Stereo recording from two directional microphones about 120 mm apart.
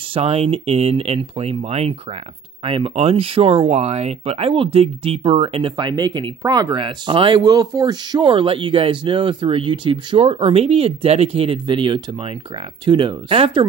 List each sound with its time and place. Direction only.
0.1 s speech: 55° right (ahead or behind)